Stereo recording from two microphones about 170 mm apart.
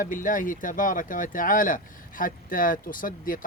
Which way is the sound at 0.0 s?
50° left (ahead or behind).